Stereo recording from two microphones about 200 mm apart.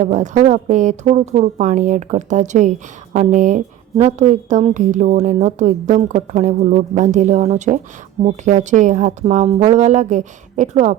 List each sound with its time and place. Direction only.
0.0 s speech: 40° right (ahead or behind)